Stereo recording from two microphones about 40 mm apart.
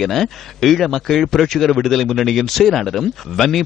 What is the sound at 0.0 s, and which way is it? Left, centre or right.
Speech, centre.